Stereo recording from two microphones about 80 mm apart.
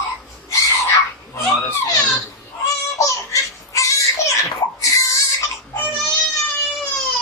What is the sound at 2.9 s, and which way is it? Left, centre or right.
Baby laughter, left.